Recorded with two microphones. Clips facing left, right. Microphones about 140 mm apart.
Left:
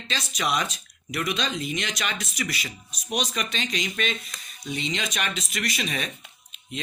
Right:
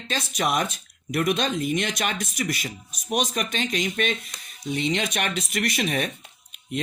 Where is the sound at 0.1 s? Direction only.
50° right (ahead or behind).